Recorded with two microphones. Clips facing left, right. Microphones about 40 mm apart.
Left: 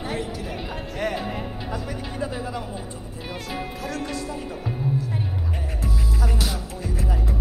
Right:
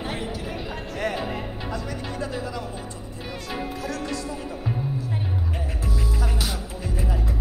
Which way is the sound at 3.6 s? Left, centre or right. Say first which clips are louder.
Even; centre.